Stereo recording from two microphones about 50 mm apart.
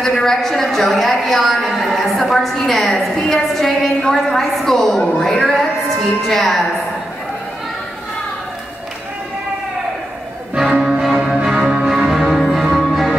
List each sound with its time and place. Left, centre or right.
0.0 s a woman's voice: centre
10.5 s music: centre